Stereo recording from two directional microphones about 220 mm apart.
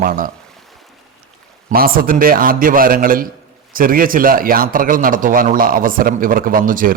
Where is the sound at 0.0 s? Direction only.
40° right (ahead or behind).